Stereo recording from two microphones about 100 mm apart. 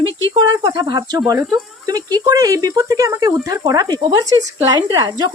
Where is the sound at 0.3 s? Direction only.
40° right (ahead or behind).